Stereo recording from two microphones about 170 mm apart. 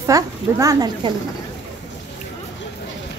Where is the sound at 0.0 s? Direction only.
20° right (ahead or behind).